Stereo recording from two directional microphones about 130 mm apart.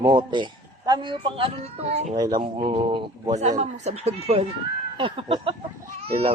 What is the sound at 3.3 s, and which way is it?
Speech, 65° right (ahead or behind).